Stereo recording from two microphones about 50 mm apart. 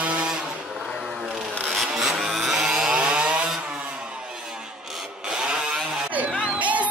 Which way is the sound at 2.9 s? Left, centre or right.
Right.